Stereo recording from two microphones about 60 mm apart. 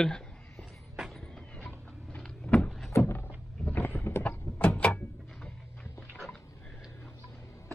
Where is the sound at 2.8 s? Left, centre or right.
Left.